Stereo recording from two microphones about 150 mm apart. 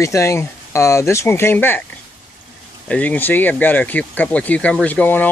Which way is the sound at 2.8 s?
10° left (ahead or behind).